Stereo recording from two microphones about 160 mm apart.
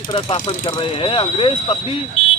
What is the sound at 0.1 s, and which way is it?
Speech, 30° left (ahead or behind).